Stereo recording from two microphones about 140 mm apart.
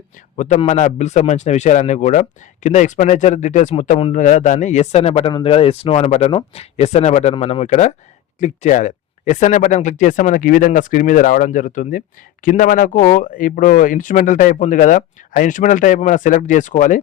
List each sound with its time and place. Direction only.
0.3 s speech: 55° left (ahead or behind)